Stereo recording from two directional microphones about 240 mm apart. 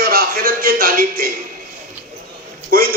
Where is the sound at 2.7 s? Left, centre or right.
Right.